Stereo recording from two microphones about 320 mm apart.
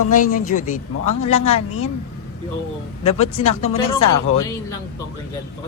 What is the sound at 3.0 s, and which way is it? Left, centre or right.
Speech, centre.